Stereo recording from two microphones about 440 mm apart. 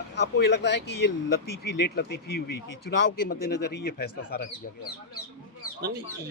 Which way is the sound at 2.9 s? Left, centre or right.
Left.